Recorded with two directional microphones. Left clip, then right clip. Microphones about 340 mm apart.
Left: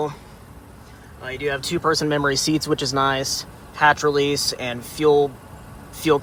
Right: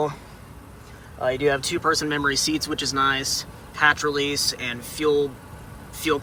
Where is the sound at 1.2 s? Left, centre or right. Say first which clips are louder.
Right 4 dB; centre.